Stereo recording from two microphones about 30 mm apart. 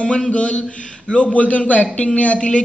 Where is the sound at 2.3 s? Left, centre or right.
Left.